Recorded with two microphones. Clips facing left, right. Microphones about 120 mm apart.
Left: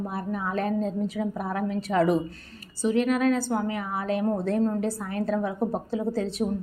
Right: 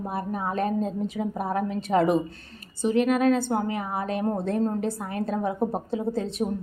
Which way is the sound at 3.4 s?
55° right (ahead or behind).